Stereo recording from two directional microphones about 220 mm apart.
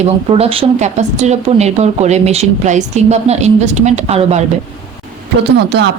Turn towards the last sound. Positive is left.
turn(degrees=-50)  # may be behind; listen again after turning